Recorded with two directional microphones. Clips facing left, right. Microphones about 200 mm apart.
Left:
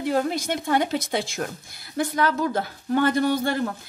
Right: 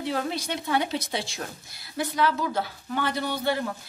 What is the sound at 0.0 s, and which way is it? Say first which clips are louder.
A woman's voice: left 5 dB; 45° left (ahead or behind).